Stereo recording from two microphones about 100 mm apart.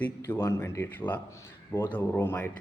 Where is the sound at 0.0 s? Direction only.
20° left (ahead or behind).